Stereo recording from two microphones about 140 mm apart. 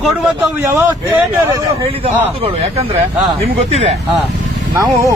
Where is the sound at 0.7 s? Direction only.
15° right (ahead or behind).